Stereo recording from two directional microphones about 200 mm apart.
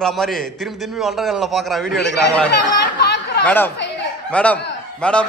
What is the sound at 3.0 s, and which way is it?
Chatter, 55° left (ahead or behind).